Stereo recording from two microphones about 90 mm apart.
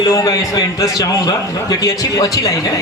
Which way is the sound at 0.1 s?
45° left (ahead or behind).